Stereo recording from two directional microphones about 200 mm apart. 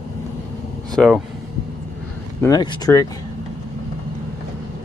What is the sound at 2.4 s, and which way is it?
Speech, 20° left (ahead or behind).